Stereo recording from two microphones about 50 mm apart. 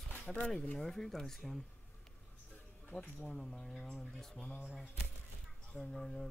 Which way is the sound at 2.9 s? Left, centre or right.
Left.